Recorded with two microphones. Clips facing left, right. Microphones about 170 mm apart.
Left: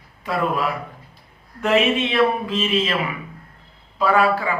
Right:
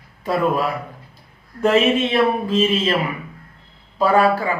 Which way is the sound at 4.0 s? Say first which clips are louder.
Right 2 dB; 35° right (ahead or behind).